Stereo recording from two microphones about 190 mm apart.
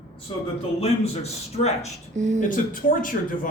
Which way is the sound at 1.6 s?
40° left (ahead or behind).